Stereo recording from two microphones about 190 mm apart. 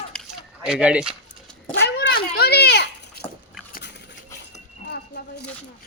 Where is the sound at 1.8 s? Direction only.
60° left (ahead or behind).